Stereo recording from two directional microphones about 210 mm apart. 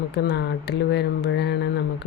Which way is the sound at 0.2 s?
55° left (ahead or behind).